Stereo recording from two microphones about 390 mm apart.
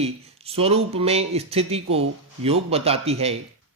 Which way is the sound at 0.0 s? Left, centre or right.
Centre.